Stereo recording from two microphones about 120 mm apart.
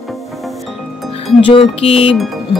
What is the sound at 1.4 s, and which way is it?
Speech, 50° left (ahead or behind).